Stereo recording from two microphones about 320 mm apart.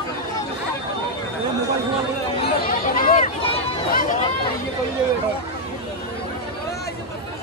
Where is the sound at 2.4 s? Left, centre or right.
Left.